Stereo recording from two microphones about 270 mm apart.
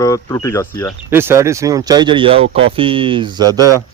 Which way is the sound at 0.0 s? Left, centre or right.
Centre.